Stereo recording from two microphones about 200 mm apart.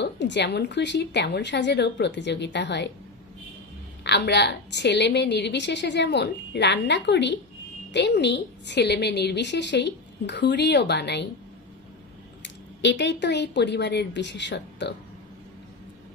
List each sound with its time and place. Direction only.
0.0 s a woman's voice: 60° left (ahead or behind)
4.0 s a woman's voice: 55° left (ahead or behind)
12.8 s a woman's voice: 60° left (ahead or behind)